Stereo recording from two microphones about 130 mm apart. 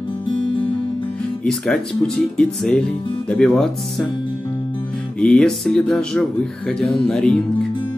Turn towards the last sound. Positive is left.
turn(degrees=5)  # may be behind; listen again after turning